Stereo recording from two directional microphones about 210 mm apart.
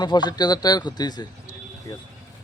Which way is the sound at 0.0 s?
20° left (ahead or behind).